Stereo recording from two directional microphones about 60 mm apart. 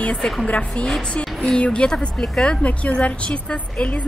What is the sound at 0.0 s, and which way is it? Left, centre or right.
A woman's voice, left.